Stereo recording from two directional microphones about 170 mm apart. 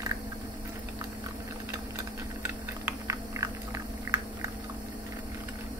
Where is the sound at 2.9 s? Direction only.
20° right (ahead or behind).